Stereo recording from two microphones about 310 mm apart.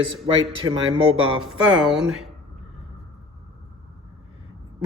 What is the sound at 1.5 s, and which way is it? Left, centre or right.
Speech, centre.